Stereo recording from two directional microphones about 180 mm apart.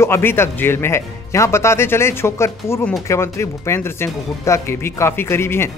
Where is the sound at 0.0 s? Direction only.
15° left (ahead or behind).